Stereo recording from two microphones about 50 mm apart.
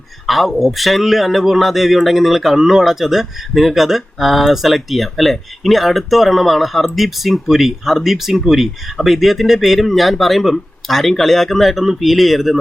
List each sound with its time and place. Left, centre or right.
0.3 s a man's voice: centre